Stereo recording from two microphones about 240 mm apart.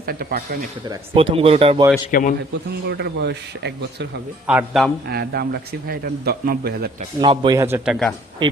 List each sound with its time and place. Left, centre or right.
0.0 s a man's voice: right
0.9 s speech: right
2.0 s a man's voice: left
2.9 s speech: right
4.4 s speech: centre
5.0 s a man's voice: right
7.2 s a man's voice: centre